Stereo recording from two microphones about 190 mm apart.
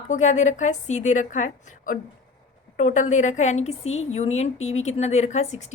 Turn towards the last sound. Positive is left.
turn(degrees=35)  # may be behind; listen again after turning